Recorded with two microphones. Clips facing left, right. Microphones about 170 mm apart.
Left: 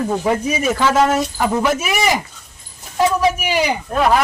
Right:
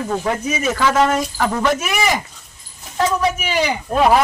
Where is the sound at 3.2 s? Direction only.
10° left (ahead or behind).